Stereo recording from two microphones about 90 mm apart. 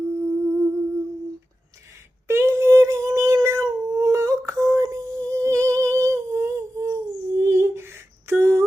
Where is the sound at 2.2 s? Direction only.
30° right (ahead or behind).